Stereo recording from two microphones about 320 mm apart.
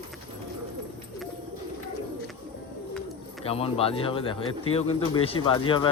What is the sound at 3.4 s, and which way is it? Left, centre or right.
Speech, centre.